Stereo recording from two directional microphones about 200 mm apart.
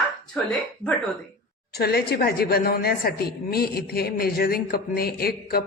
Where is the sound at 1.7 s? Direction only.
50° left (ahead or behind).